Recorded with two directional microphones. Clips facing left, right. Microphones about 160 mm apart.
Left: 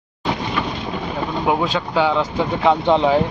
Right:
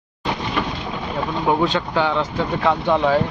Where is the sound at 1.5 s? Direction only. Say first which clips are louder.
Right 1 dB; 10° left (ahead or behind).